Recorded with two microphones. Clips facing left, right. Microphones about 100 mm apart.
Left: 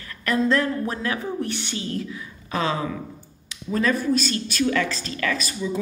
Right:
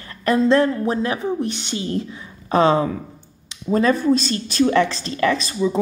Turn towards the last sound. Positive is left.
turn(degrees=-30)  # may be behind; listen again after turning